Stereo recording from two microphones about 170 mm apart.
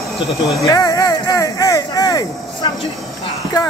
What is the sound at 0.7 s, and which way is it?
Speech, 20° left (ahead or behind).